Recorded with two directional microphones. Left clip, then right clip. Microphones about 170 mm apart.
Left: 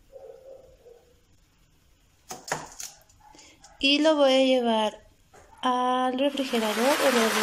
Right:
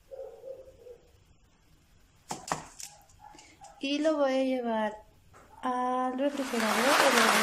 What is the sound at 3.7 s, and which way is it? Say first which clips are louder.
A woman's voice: left 7 dB; 5° left (ahead or behind).